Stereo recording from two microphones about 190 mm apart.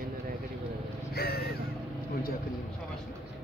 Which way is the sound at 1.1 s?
55° left (ahead or behind).